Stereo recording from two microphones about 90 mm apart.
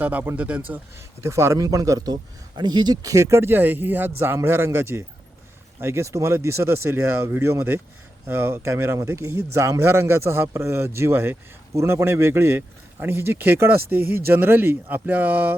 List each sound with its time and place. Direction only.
0.0 s speech: 15° right (ahead or behind)
1.2 s speech: 30° right (ahead or behind)